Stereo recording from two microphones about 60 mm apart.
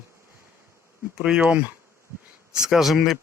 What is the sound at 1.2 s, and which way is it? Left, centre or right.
Speech, centre.